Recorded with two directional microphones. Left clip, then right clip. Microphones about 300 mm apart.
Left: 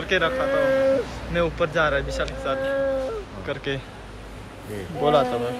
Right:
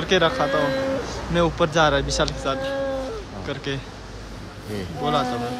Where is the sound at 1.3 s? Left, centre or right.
Centre.